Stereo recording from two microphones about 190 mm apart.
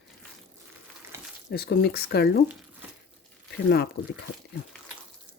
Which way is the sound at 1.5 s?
55° left (ahead or behind).